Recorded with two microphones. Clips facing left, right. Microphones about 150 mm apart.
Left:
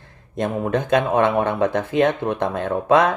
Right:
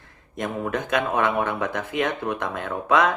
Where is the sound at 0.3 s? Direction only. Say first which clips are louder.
Left 5 dB; 30° left (ahead or behind).